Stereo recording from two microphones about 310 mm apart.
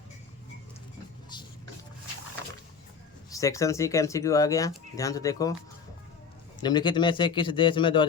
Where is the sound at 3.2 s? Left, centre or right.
Centre.